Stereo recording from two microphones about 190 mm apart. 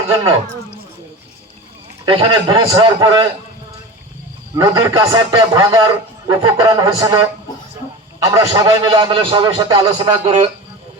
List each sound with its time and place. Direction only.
2.0 s a man's voice: 25° right (ahead or behind)
4.5 s a man's voice: 20° right (ahead or behind)
9.9 s a man's voice: 30° right (ahead or behind)